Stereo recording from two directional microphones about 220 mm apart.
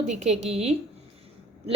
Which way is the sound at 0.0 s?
30° right (ahead or behind).